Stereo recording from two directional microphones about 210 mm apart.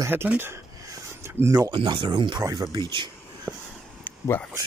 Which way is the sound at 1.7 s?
25° right (ahead or behind).